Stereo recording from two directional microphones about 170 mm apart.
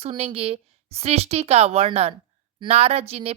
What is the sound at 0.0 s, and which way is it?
Speech, 35° right (ahead or behind).